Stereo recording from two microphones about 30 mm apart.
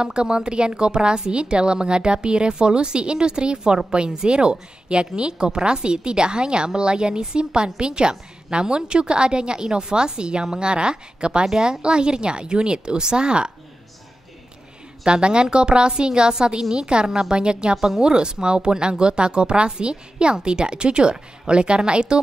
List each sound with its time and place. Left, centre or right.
0.0 s a woman's voice: right
15.0 s a woman's voice: right